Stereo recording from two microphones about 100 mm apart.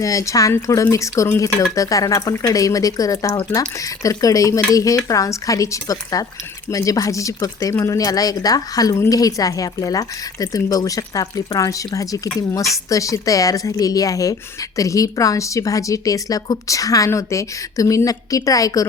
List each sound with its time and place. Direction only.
0.0 s speech: 35° left (ahead or behind)